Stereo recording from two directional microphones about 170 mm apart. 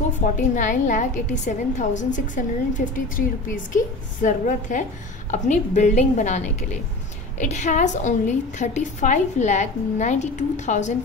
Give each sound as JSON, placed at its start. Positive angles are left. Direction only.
{"t": 0.6, "sound": "a woman's voice", "side_deg": 45}